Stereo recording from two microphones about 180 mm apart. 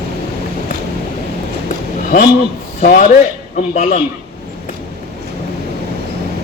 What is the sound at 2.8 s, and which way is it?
A man's voice, 50° left (ahead or behind).